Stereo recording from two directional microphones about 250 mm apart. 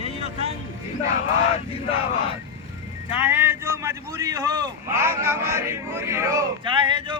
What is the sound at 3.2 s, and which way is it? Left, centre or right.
A man's voice, centre.